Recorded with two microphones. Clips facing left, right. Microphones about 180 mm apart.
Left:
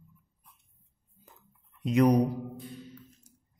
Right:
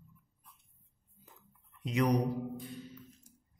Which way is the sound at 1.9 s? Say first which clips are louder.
Left 7 dB; 45° left (ahead or behind).